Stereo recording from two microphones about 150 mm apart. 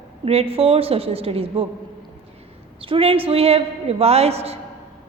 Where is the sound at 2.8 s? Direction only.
40° right (ahead or behind).